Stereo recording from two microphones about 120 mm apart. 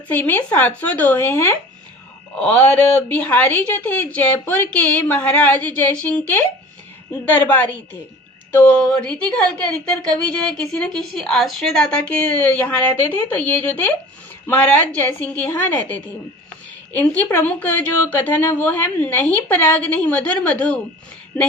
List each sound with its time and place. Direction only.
0.1 s a woman's voice: 15° left (ahead or behind)
10.3 s a woman's voice: 5° left (ahead or behind)